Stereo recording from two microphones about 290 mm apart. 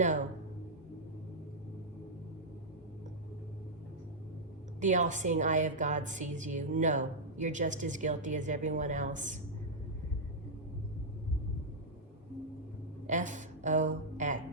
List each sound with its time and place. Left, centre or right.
4.8 s a woman's voice: right
13.1 s speech: right